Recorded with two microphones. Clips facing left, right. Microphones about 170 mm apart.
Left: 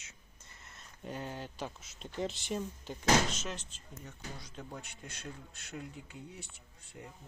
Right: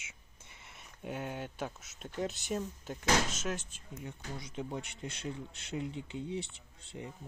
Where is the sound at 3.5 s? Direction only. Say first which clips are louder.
Right 5 dB; 50° right (ahead or behind).